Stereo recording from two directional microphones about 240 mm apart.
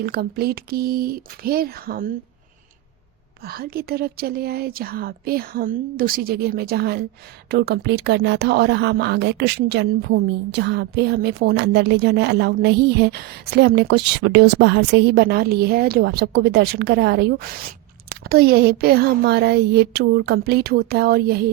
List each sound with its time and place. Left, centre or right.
0.0 s a woman's voice: right
3.4 s a woman's voice: right